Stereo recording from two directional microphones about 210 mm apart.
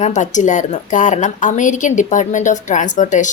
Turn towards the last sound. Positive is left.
turn(degrees=35)  # may be behind; listen again after turning